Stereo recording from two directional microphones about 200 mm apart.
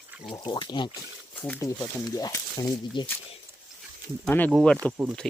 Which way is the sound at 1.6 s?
15° left (ahead or behind).